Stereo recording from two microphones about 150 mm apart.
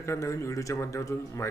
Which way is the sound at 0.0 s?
20° left (ahead or behind).